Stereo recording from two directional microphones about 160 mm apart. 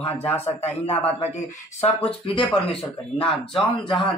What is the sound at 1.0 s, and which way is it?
Speech, 40° left (ahead or behind).